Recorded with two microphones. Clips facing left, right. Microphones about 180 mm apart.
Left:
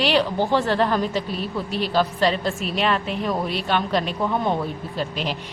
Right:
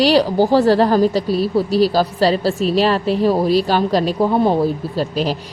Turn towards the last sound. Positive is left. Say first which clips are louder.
# right 7 dB
turn(degrees=-35)  # may be behind; listen again after turning